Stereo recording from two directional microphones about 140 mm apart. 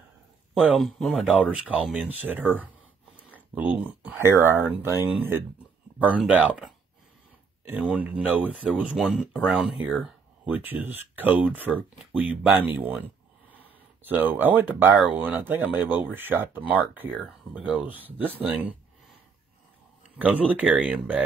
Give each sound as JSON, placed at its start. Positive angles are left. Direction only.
{"t": 0.6, "sound": "speech", "side_deg": 0}
{"t": 3.3, "sound": "a sound", "side_deg": -10}
{"t": 4.2, "sound": "speech", "side_deg": -15}
{"t": 10.4, "sound": "speech", "side_deg": -15}
{"t": 20.2, "sound": "speech", "side_deg": -10}